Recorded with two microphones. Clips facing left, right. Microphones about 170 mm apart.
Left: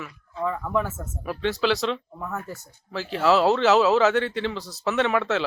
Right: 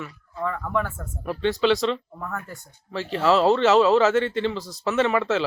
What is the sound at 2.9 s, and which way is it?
Speech, centre (ahead or behind).